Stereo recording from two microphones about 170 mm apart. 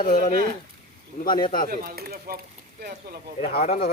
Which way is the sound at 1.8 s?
60° right (ahead or behind).